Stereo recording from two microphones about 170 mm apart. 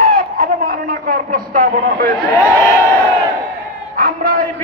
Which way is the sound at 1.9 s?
70° right (ahead or behind).